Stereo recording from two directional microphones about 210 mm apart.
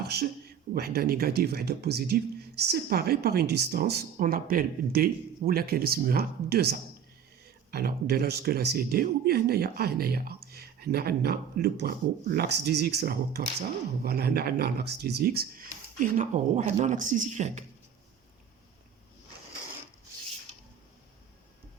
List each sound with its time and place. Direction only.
0.0 s speech: 50° right (ahead or behind)